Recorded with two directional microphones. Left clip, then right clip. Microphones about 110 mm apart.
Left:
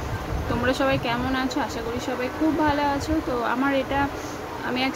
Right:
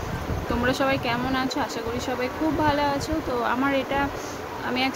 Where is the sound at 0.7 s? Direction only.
10° right (ahead or behind).